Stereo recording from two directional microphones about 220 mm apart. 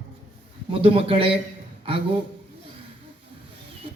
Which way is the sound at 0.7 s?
25° right (ahead or behind).